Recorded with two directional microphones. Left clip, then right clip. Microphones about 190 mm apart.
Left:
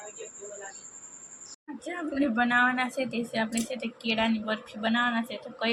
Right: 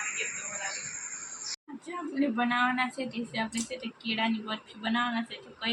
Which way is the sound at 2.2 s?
25° left (ahead or behind).